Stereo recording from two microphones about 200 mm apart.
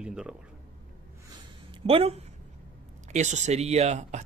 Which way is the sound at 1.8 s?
30° right (ahead or behind).